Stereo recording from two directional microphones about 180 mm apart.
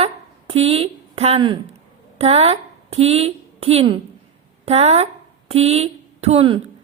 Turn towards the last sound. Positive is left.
turn(degrees=-30)  # may be behind; listen again after turning